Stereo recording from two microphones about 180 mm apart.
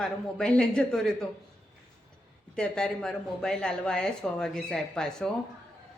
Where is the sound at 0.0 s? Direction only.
5° left (ahead or behind).